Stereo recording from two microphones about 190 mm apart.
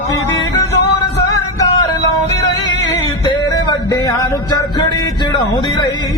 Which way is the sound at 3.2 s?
20° left (ahead or behind).